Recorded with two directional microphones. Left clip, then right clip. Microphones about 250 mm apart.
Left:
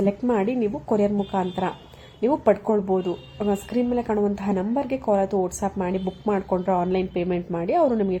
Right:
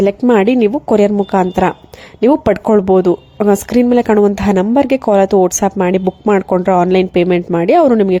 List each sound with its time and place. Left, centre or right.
0.0 s speech: right